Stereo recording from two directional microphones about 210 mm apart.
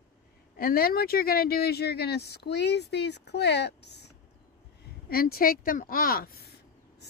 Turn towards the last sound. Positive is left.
turn(degrees=45)  # may be behind; listen again after turning